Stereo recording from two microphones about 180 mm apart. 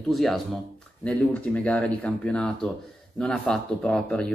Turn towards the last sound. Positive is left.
turn(degrees=5)  # may be behind; listen again after turning